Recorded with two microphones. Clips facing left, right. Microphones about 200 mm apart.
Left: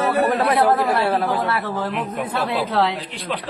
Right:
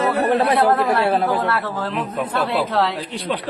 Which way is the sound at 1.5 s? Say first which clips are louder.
Even; 15° left (ahead or behind).